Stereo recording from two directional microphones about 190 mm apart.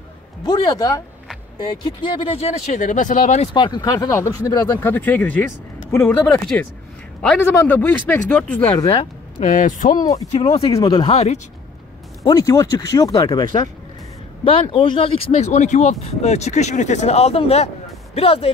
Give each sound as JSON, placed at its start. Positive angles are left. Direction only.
{"t": 0.5, "sound": "speech", "side_deg": 20}
{"t": 3.5, "sound": "speech", "side_deg": 25}
{"t": 8.7, "sound": "speech", "side_deg": 20}
{"t": 9.4, "sound": "speech", "side_deg": 45}
{"t": 10.3, "sound": "speech", "side_deg": 30}
{"t": 12.2, "sound": "speech", "side_deg": 20}